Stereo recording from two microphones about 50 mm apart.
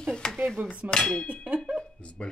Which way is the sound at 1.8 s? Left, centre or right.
Left.